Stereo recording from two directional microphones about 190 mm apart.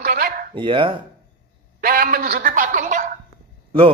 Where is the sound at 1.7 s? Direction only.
50° right (ahead or behind).